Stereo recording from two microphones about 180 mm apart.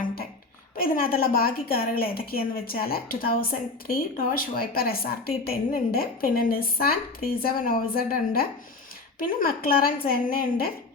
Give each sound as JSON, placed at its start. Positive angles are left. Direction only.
{"t": 0.8, "sound": "a woman's voice", "side_deg": 55}